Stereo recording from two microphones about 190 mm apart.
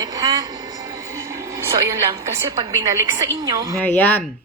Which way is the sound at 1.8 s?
15° right (ahead or behind).